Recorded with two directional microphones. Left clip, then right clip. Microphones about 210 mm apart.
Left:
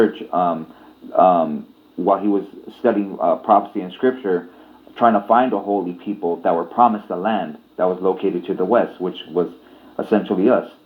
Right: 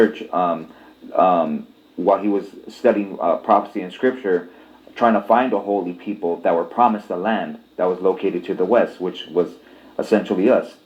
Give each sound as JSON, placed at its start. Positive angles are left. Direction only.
{"t": 0.2, "sound": "speech", "side_deg": 25}